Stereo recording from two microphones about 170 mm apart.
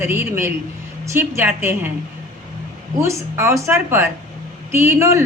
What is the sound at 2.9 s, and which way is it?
A woman's voice, 15° right (ahead or behind).